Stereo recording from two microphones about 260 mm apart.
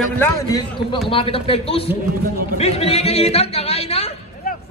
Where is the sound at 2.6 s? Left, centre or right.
Left.